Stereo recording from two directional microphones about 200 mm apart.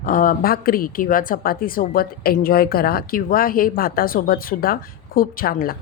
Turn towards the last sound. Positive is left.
turn(degrees=45)  # may be behind; listen again after turning